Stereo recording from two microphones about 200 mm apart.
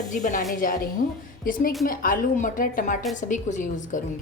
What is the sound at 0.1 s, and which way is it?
A woman's voice, 40° left (ahead or behind).